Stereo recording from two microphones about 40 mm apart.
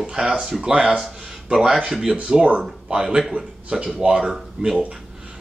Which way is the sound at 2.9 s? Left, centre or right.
Right.